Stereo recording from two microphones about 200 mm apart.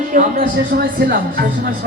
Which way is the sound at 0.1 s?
40° right (ahead or behind).